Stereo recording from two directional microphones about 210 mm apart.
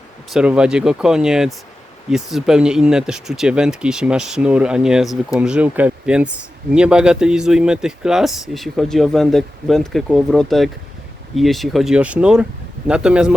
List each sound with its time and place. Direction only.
0.3 s speech: 5° right (ahead or behind)